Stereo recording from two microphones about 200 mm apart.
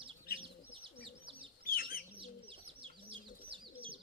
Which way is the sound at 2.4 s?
25° right (ahead or behind).